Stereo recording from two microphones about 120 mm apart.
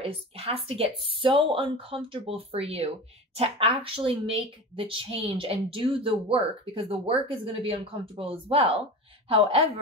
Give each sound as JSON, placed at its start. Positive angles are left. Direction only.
{"t": 0.0, "sound": "a woman's voice", "side_deg": -55}